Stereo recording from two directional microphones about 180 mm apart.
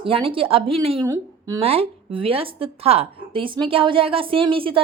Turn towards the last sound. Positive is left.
turn(degrees=-30)  # may be behind; listen again after turning